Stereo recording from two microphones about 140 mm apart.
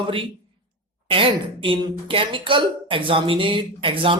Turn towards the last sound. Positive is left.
turn(degrees=-40)  # may be behind; listen again after turning